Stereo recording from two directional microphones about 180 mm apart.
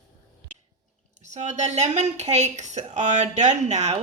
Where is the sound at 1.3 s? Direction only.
40° right (ahead or behind).